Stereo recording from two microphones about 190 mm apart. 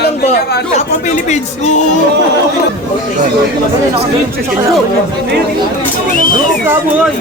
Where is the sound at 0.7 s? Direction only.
35° left (ahead or behind).